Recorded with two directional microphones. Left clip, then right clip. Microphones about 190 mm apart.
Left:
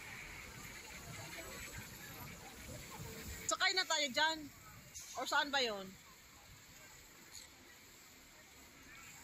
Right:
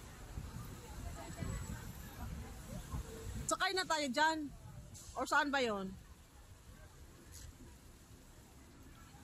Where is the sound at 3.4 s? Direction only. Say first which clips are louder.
Left 1 dB; 25° right (ahead or behind).